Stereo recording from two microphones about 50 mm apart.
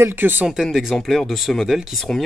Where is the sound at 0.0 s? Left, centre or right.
Right.